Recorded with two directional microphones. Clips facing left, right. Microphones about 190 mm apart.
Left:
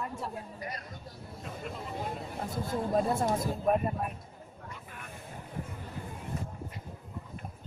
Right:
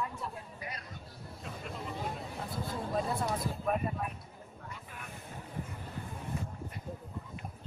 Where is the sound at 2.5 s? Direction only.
45° left (ahead or behind).